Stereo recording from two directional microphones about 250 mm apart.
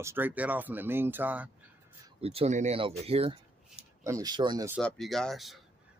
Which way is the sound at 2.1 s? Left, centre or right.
Right.